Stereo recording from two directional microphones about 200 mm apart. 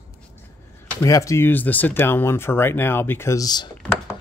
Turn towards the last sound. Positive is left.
turn(degrees=20)  # may be behind; listen again after turning